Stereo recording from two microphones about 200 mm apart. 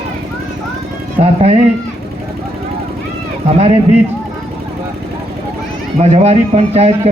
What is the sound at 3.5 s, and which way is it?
Speech, 30° right (ahead or behind).